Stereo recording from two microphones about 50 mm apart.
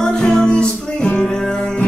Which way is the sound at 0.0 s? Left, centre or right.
Centre.